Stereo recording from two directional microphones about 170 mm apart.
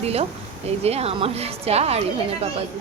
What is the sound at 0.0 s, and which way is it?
Speech, 35° right (ahead or behind).